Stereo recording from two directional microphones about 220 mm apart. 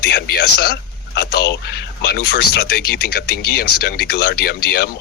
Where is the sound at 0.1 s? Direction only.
50° left (ahead or behind).